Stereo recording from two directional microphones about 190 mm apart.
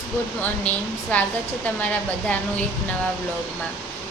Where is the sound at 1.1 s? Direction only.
10° left (ahead or behind).